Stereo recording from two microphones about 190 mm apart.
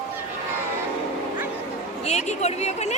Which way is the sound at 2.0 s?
35° left (ahead or behind).